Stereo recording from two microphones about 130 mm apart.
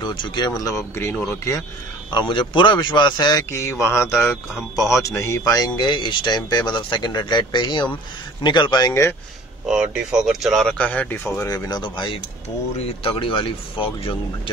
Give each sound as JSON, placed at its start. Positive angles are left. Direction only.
{"t": 0.0, "sound": "speech", "side_deg": 40}
{"t": 2.0, "sound": "speech", "side_deg": 35}
{"t": 3.5, "sound": "speech", "side_deg": 20}
{"t": 9.7, "sound": "speech", "side_deg": -5}
{"t": 11.5, "sound": "speech", "side_deg": 30}
{"t": 12.7, "sound": "speech", "side_deg": 45}